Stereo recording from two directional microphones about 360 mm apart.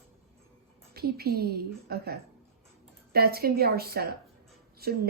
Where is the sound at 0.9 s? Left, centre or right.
Right.